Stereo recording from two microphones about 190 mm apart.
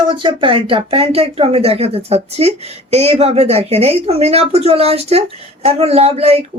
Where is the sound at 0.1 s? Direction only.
25° right (ahead or behind).